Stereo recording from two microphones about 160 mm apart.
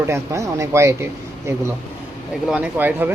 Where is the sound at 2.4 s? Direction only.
5° right (ahead or behind).